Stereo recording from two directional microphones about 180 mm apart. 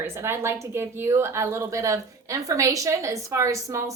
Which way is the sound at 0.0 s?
15° right (ahead or behind).